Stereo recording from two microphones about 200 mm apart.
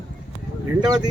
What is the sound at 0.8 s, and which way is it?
Speech, 20° right (ahead or behind).